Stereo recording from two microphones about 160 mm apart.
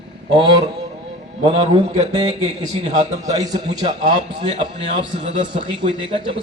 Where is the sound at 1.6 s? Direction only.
45° right (ahead or behind).